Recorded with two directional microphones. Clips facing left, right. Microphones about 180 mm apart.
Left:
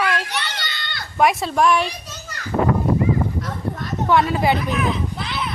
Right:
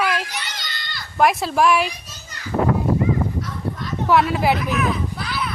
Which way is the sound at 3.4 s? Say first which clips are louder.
Left 1 dB; 50° left (ahead or behind).